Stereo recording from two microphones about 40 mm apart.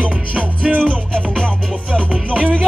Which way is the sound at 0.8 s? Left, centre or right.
Left.